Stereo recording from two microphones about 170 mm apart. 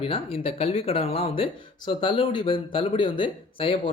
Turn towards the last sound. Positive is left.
turn(degrees=30)  # may be behind; listen again after turning